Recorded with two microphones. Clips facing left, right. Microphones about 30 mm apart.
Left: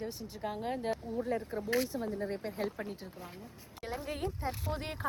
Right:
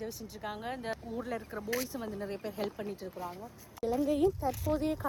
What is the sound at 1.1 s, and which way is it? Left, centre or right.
Speech, right.